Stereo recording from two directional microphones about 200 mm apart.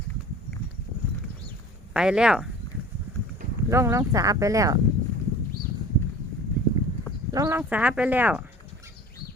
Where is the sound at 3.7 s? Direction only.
15° right (ahead or behind).